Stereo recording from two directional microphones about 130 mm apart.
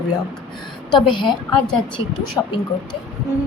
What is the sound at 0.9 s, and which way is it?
Speech, 35° left (ahead or behind).